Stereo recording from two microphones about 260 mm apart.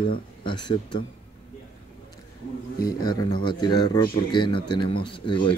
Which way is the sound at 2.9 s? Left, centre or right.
Centre.